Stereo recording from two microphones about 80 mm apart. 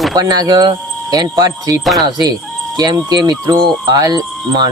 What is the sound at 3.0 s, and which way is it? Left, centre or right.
Speech, right.